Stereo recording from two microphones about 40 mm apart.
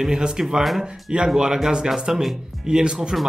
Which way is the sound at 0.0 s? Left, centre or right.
Centre.